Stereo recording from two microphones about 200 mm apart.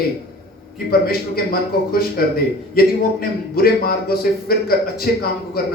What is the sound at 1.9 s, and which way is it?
A man's voice, 50° left (ahead or behind).